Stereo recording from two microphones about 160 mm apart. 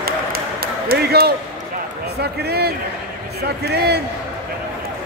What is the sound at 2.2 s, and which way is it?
A man's voice, 85° right.